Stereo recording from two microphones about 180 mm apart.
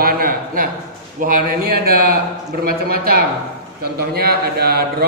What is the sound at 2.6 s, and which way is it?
A man's voice, 55° right (ahead or behind).